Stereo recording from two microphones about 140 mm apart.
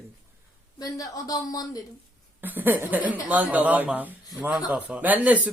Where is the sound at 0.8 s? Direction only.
25° left (ahead or behind).